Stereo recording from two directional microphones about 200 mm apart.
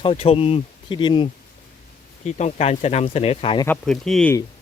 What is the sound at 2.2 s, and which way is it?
Speech, 35° left (ahead or behind).